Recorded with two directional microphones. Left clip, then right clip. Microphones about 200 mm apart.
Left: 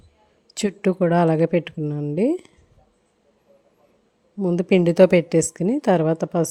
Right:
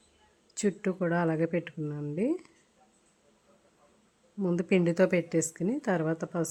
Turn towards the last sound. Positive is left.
turn(degrees=35)  # may be behind; listen again after turning